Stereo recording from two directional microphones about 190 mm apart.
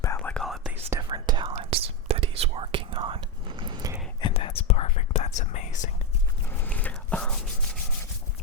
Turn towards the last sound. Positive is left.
turn(degrees=5)  # may be behind; listen again after turning